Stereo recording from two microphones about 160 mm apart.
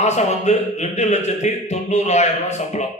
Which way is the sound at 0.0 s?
45° left (ahead or behind).